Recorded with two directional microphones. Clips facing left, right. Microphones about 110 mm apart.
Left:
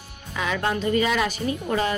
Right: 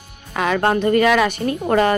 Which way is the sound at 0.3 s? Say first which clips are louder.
Right 7 dB; 55° right (ahead or behind).